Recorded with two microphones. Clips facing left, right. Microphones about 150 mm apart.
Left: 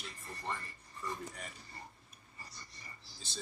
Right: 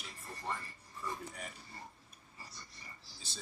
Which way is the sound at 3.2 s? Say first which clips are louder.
Left 5 dB; 10° right (ahead or behind).